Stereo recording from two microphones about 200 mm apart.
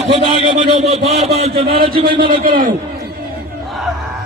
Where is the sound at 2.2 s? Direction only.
45° right (ahead or behind).